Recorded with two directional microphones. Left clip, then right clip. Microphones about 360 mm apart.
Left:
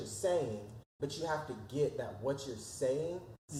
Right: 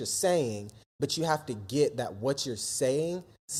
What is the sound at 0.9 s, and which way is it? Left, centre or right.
Speech, right.